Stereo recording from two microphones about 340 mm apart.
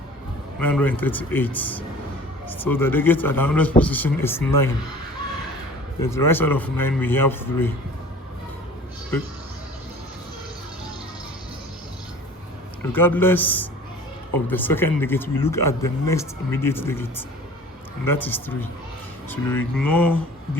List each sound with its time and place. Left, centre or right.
0.6 s speech: centre
6.0 s speech: centre
12.8 s speech: centre